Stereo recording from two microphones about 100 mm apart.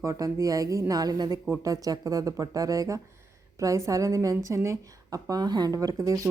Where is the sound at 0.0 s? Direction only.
30° right (ahead or behind).